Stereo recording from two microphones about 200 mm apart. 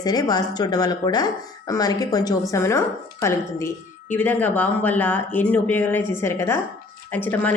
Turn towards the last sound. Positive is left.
turn(degrees=10)  # may be behind; listen again after turning